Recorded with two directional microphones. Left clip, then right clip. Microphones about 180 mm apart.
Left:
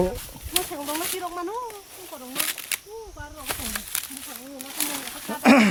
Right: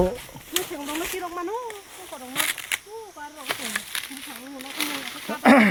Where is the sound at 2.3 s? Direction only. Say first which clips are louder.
Right 4 dB; 35° left (ahead or behind).